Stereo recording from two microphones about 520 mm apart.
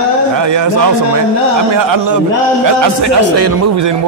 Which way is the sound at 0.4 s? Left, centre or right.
Right.